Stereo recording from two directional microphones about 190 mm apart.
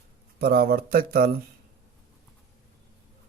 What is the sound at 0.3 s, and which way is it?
Speech, 55° right (ahead or behind).